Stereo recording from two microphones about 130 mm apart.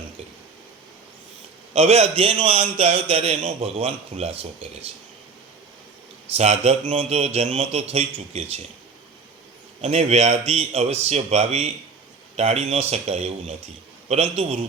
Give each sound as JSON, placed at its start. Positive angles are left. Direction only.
{"t": 1.7, "sound": "a man's voice", "side_deg": -50}
{"t": 6.3, "sound": "a man's voice", "side_deg": -55}
{"t": 9.8, "sound": "a man's voice", "side_deg": -55}